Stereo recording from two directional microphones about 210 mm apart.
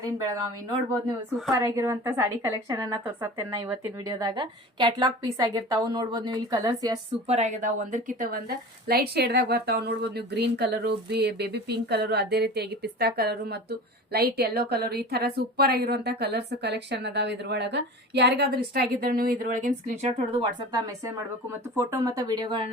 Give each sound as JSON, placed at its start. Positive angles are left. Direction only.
{"t": 1.5, "sound": "a woman's voice", "side_deg": -15}
{"t": 7.3, "sound": "a woman's voice", "side_deg": -30}
{"t": 20.4, "sound": "a woman's voice", "side_deg": -20}